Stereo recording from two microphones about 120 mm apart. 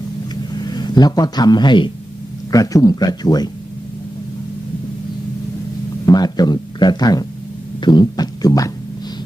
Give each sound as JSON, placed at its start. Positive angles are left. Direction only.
{"t": 0.5, "sound": "a man's voice", "side_deg": 35}
{"t": 6.0, "sound": "speech", "side_deg": 35}